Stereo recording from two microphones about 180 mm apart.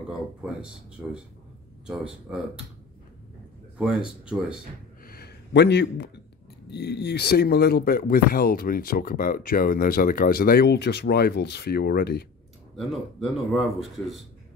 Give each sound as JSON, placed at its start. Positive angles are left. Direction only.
{"t": 1.0, "sound": "speech", "side_deg": -5}
{"t": 3.7, "sound": "speech", "side_deg": -5}
{"t": 5.0, "sound": "a sound", "side_deg": 60}
{"t": 6.7, "sound": "speech", "side_deg": 65}
{"t": 12.7, "sound": "speech", "side_deg": 0}